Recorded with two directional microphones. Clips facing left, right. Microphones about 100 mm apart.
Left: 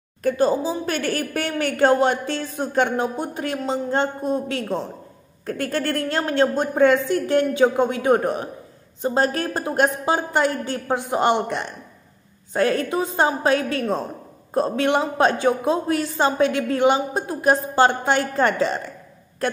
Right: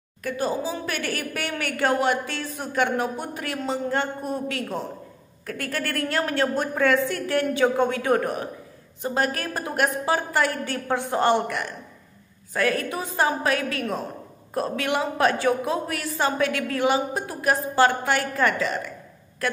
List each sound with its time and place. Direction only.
0.2 s a woman's voice: 35° left (ahead or behind)